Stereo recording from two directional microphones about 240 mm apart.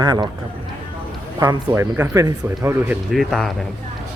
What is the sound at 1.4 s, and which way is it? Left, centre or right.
Speech, centre.